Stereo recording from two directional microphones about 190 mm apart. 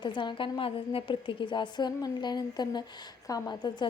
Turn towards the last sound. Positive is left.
turn(degrees=20)  # may be behind; listen again after turning